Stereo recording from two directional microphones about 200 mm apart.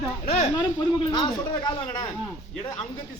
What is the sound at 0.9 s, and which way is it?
Speech, 20° left (ahead or behind).